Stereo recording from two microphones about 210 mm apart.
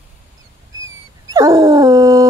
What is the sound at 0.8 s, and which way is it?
Dog, 15° right (ahead or behind).